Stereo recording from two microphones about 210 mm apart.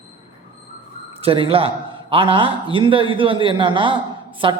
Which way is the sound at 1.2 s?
25° right (ahead or behind).